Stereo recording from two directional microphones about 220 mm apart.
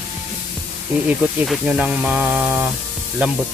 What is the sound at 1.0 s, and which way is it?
Speech, 5° right (ahead or behind).